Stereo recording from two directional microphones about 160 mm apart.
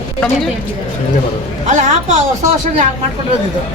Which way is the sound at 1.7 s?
45° right (ahead or behind).